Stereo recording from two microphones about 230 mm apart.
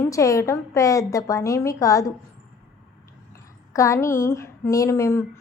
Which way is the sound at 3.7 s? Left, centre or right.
Centre.